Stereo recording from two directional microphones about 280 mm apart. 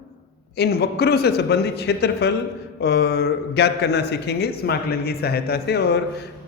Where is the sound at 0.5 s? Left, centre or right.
Left.